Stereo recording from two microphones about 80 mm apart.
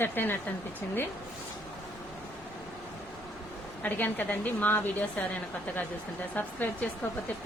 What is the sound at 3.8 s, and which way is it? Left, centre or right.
A woman's voice, left.